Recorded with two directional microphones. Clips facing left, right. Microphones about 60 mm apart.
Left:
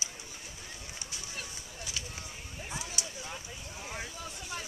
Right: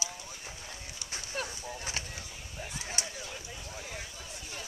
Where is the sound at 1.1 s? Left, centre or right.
Right.